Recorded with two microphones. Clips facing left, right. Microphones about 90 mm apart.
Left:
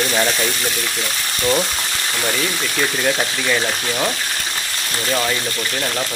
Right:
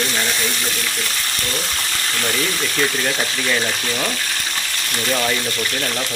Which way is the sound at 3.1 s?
5° left (ahead or behind).